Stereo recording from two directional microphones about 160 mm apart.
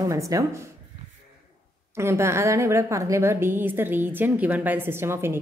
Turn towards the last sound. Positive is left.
turn(degrees=-15)  # may be behind; listen again after turning